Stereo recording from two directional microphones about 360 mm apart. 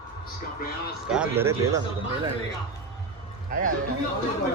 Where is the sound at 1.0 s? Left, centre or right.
Centre.